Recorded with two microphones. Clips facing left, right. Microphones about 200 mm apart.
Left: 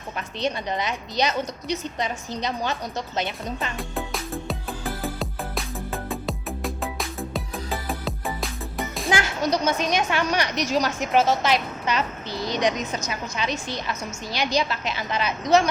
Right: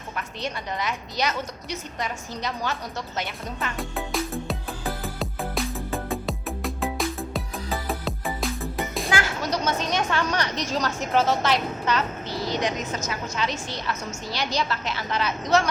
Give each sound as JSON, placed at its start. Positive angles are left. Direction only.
{"t": 0.2, "sound": "a woman's voice", "side_deg": 20}
{"t": 3.8, "sound": "music", "side_deg": 0}
{"t": 9.0, "sound": "a woman's voice", "side_deg": 15}